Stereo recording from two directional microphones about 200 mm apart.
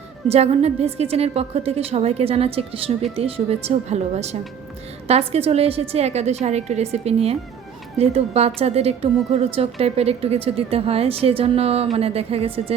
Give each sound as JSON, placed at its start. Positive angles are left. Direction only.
{"t": 0.3, "sound": "a woman's voice", "side_deg": -30}